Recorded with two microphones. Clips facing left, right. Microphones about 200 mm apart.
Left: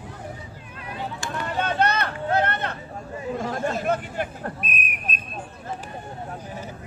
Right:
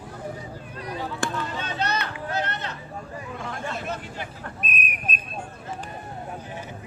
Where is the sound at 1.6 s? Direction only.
55° left (ahead or behind).